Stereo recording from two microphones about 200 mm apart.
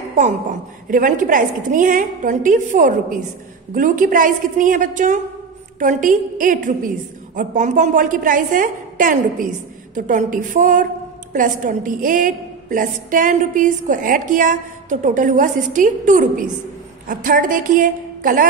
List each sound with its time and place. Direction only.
0.1 s a woman's voice: 40° right (ahead or behind)